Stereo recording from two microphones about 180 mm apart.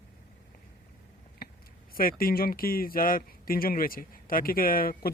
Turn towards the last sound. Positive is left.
turn(degrees=55)  # may be behind; listen again after turning